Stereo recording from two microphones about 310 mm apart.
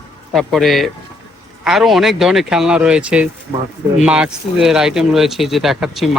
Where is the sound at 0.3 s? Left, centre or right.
Centre.